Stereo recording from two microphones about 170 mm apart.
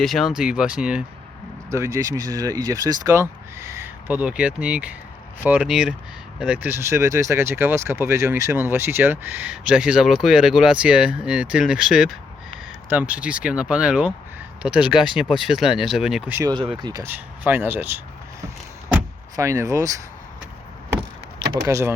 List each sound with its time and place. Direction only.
0.0 s speech: centre (ahead or behind)
1.7 s speech: 15° right (ahead or behind); by 16.3 s centre (ahead or behind)
16.3 s speech: 20° right (ahead or behind)
19.4 s speech: 20° right (ahead or behind)
21.5 s speech: 15° right (ahead or behind)